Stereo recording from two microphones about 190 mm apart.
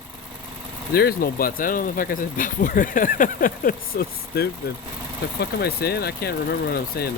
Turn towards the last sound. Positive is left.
turn(degrees=55)  # may be behind; listen again after turning